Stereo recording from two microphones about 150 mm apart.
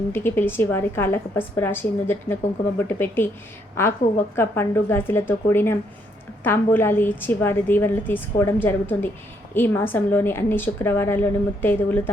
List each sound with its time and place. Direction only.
0.1 s a woman's voice: 15° left (ahead or behind)
4.4 s a woman's voice: 15° left (ahead or behind)